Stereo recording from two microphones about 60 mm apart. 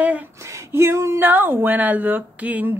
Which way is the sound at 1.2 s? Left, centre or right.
Right.